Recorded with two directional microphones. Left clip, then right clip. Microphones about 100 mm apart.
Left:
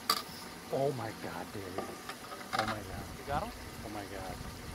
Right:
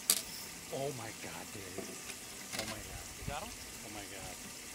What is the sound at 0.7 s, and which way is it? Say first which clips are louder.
Speech: left 7 dB; 20° right (ahead or behind).